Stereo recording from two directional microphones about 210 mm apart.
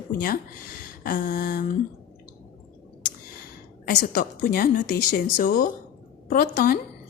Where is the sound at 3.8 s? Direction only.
40° left (ahead or behind).